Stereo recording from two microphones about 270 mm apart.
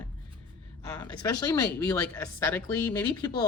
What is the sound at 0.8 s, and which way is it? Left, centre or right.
Speech, centre.